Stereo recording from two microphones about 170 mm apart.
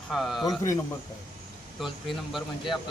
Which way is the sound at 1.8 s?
Centre (ahead or behind).